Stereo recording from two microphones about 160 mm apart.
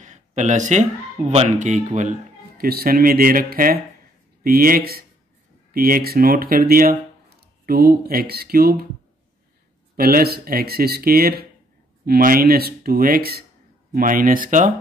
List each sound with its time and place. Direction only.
0.0 s speech: 50° right (ahead or behind); by 8.8 s 75° right (ahead or behind)
9.9 s speech: 70° right (ahead or behind)
13.9 s speech: 60° right (ahead or behind)